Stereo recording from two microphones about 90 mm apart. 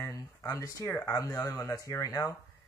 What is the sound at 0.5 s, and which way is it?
Speech, 40° left (ahead or behind).